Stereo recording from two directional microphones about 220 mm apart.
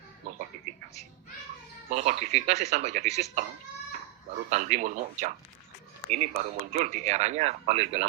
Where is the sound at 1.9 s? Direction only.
35° right (ahead or behind).